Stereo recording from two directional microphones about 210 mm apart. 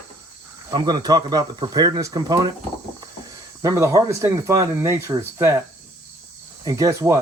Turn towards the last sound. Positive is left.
turn(degrees=-15)  # may be behind; listen again after turning